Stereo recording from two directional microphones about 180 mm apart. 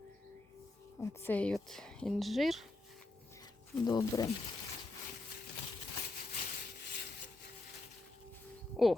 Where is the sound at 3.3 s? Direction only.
20° left (ahead or behind).